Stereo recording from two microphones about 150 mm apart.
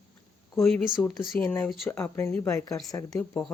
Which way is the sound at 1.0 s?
10° left (ahead or behind).